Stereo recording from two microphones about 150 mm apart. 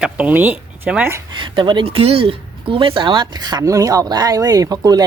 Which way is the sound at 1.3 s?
30° right (ahead or behind).